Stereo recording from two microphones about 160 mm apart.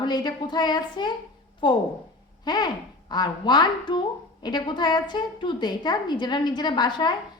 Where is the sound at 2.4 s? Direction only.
25° left (ahead or behind).